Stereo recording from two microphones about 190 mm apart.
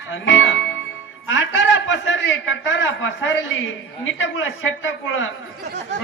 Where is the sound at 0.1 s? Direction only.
85° left.